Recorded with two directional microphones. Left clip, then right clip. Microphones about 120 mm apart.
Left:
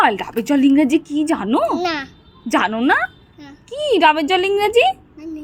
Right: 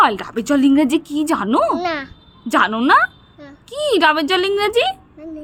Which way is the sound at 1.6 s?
15° right (ahead or behind).